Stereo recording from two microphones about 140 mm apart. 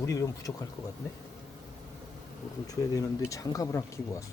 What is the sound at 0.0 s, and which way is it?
Speech, 25° left (ahead or behind).